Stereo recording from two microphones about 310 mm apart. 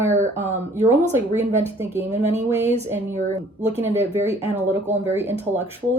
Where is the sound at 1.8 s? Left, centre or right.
Centre.